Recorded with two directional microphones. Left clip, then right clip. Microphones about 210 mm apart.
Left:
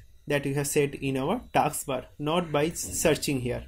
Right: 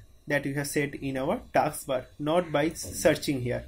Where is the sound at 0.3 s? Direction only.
30° left (ahead or behind).